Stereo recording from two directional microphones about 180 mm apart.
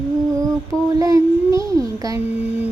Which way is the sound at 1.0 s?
20° right (ahead or behind).